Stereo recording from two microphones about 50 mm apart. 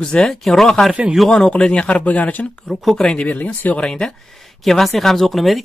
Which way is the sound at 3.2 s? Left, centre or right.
Left.